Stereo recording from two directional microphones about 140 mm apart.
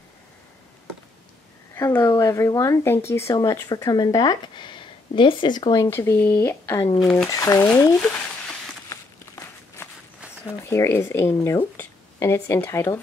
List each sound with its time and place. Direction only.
1.8 s speech: 20° left (ahead or behind)
5.9 s speech: 15° left (ahead or behind)
7.0 s speech: 5° left (ahead or behind)
7.2 s speech: 25° left (ahead or behind)
8.0 s frying: 10° left (ahead or behind)
8.8 s walk: 25° left (ahead or behind)
10.7 s speech: 20° left (ahead or behind)